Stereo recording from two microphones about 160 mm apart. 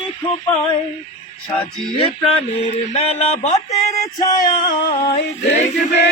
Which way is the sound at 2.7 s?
40° left (ahead or behind).